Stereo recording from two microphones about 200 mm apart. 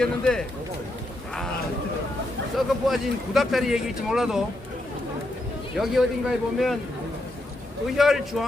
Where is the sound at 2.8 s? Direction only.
Centre (ahead or behind).